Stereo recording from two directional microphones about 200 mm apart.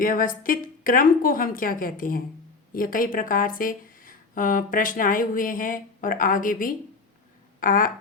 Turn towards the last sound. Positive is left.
turn(degrees=45)  # may be behind; listen again after turning